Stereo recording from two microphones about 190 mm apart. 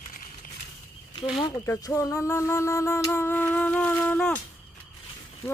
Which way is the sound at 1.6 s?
15° left (ahead or behind).